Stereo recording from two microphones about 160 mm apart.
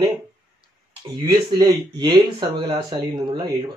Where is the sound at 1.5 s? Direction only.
25° right (ahead or behind).